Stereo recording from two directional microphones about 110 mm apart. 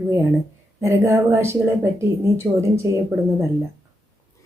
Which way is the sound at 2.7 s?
25° right (ahead or behind).